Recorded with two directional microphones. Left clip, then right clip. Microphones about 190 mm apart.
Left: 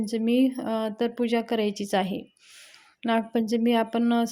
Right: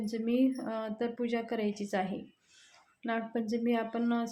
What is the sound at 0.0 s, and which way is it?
A woman's voice, 45° left (ahead or behind).